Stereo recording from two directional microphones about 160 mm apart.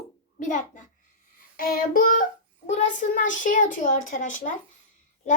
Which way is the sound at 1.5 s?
60° left (ahead or behind).